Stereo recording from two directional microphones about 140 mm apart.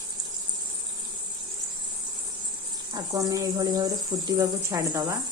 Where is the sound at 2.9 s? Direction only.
25° right (ahead or behind).